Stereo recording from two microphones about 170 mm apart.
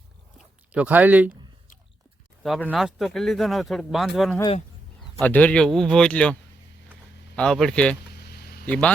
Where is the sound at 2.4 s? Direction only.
5° left (ahead or behind).